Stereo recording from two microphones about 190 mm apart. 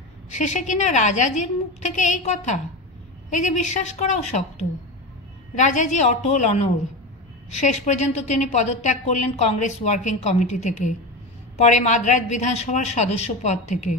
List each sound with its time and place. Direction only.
0.3 s a woman's voice: 40° left (ahead or behind)